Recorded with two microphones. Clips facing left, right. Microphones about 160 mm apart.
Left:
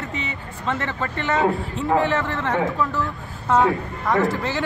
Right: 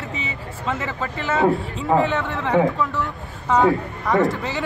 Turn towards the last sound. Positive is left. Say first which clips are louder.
# right 1 dB
turn(degrees=0)  # may be behind; listen again after turning